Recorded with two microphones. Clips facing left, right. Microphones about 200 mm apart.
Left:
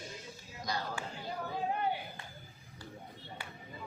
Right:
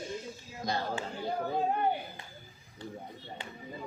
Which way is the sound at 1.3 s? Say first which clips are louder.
Right 6 dB; 55° right (ahead or behind).